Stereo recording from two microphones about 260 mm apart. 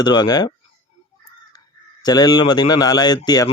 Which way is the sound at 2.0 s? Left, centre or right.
Centre.